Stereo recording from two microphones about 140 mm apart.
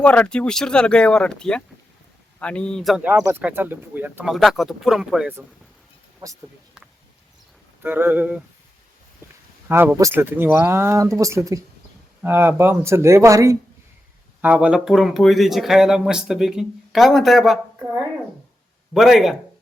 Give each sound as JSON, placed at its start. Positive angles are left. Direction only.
{"t": 0.0, "sound": "speech", "side_deg": 10}
{"t": 3.0, "sound": "speech", "side_deg": -10}
{"t": 4.3, "sound": "speech", "side_deg": 0}
{"t": 6.2, "sound": "speech", "side_deg": -30}
{"t": 7.8, "sound": "speech", "side_deg": -15}
{"t": 9.6, "sound": "speech", "side_deg": -15}
{"t": 14.4, "sound": "speech", "side_deg": -10}
{"t": 18.9, "sound": "speech", "side_deg": 0}